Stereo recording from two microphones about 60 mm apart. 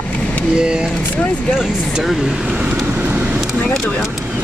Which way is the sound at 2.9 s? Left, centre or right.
Right.